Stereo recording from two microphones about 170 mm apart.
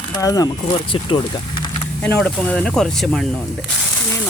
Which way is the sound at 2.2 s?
5° left (ahead or behind).